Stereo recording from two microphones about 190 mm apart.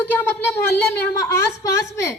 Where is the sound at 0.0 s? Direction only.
10° left (ahead or behind).